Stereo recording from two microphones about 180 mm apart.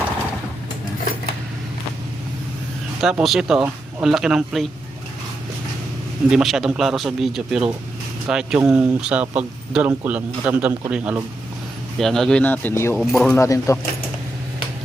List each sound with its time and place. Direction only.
3.0 s speech: centre (ahead or behind)
6.3 s speech: centre (ahead or behind)
11.9 s speech: centre (ahead or behind)
13.0 s speech: centre (ahead or behind)
13.3 s speech: 15° left (ahead or behind)